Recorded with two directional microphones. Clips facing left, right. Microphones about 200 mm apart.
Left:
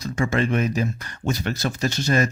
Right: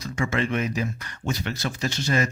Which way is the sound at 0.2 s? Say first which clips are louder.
Left 3 dB; 40° left (ahead or behind).